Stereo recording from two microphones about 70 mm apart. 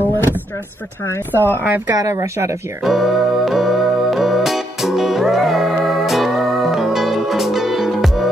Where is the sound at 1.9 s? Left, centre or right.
Right.